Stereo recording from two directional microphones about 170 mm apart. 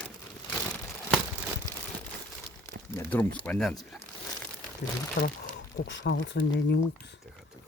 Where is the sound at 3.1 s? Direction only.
10° left (ahead or behind).